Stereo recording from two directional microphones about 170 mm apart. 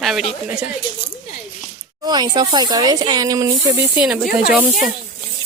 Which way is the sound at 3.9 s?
5° right (ahead or behind).